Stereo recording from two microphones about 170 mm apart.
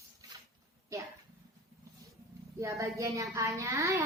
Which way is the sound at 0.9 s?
20° right (ahead or behind).